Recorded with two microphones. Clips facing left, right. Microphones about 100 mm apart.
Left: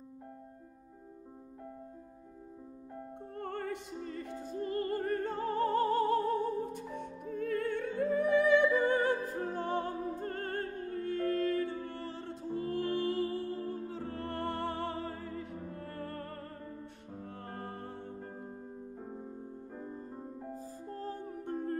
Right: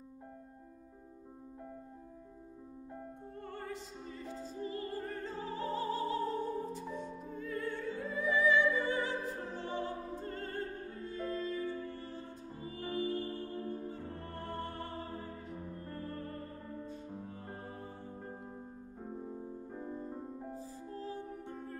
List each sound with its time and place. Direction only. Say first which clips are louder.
3.3 s music: left 6 dB; 60° left (ahead or behind); by 16.4 s 80° left
17.5 s music: left 3 dB; 70° left (ahead or behind)
20.5 s music: left 2 dB; 45° left (ahead or behind)